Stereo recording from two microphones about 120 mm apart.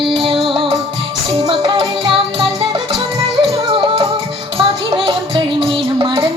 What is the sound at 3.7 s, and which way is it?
Music, 50° right (ahead or behind).